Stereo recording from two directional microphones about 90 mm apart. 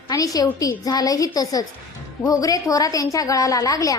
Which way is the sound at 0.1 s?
40° left (ahead or behind).